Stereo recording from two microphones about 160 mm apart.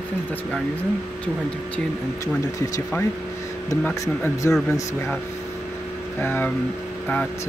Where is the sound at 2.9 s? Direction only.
15° left (ahead or behind).